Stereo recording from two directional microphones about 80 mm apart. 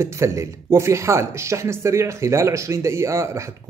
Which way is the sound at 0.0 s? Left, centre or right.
Right.